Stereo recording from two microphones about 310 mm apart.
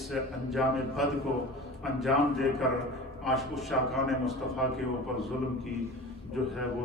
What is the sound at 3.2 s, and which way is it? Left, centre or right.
A man's voice, centre.